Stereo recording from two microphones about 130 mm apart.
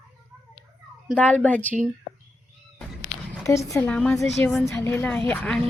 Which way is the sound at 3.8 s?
10° left (ahead or behind).